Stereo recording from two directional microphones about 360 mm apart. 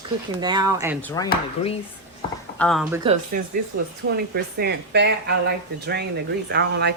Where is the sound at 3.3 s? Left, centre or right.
Right.